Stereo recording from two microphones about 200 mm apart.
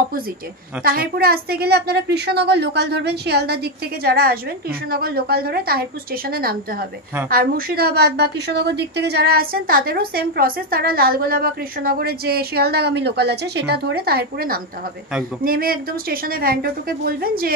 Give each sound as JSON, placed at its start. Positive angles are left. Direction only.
{"t": 0.8, "sound": "a woman's voice", "side_deg": -50}